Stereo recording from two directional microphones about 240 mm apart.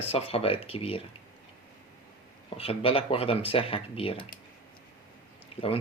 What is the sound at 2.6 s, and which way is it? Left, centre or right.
Speech, left.